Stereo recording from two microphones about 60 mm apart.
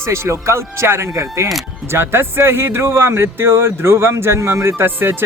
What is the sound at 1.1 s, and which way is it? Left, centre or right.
Speech, right.